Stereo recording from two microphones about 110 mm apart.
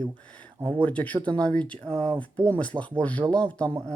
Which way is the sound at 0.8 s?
15° left (ahead or behind).